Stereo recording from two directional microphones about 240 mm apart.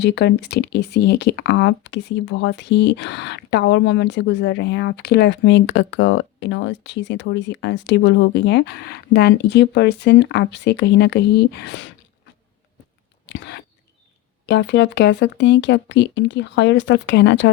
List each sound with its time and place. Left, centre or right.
0.0 s speech: left
13.2 s a sound: left
14.4 s speech: left